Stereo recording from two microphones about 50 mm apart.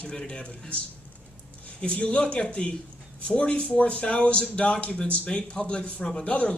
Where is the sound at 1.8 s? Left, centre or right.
Left.